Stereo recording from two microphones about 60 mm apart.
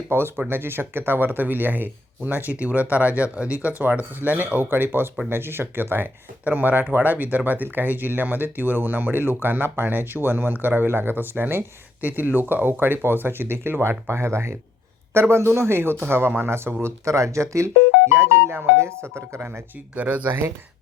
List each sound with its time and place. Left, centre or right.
0.1 s speech: right
16.8 s speech: right
20.0 s speech: right
20.2 s speech: right